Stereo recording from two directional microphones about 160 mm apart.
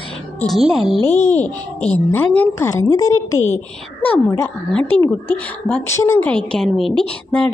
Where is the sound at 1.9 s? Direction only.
15° left (ahead or behind).